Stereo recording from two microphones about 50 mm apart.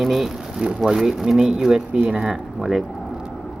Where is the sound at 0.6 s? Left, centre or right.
Centre.